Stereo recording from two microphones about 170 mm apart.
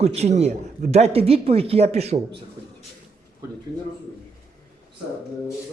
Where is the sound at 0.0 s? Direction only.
40° right (ahead or behind).